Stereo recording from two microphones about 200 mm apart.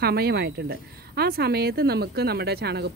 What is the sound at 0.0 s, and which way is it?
A woman's voice, 50° right (ahead or behind).